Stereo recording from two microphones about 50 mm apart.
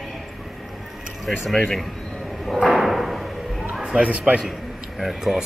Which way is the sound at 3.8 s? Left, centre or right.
Right.